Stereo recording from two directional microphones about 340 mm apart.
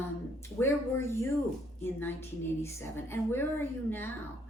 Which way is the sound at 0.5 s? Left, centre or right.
Centre.